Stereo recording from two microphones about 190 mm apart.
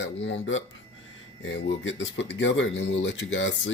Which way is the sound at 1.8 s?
75° left (ahead or behind).